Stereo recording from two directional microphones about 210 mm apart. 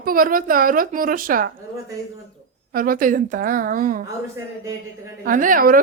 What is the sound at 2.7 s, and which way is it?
A woman's voice, 40° right (ahead or behind).